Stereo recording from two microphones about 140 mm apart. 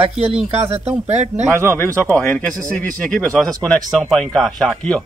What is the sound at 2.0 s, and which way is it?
A man's voice, 10° left (ahead or behind).